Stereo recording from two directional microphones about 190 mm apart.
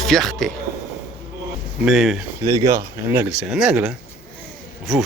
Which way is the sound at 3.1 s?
5° right (ahead or behind).